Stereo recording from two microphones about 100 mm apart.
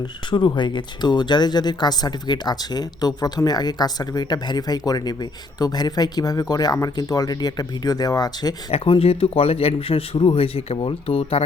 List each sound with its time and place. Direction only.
0.3 s speech: 50° left (ahead or behind)
8.7 s a man's voice: 75° left (ahead or behind)